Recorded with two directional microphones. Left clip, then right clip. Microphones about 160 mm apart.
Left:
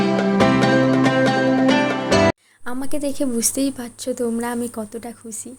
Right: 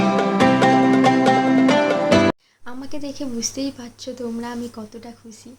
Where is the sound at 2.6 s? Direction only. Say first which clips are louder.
Left 7 dB; 60° left (ahead or behind).